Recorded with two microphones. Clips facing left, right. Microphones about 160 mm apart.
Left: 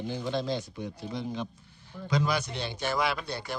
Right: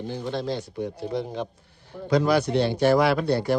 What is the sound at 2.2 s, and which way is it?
A man's voice, 65° right (ahead or behind).